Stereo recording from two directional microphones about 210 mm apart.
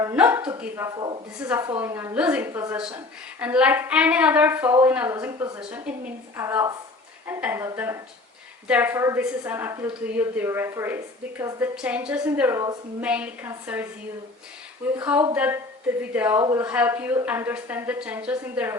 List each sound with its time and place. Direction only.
0.0 s a sound: 10° right (ahead or behind)
0.6 s a woman's voice: 15° right (ahead or behind)
15.0 s a woman's voice: 10° right (ahead or behind)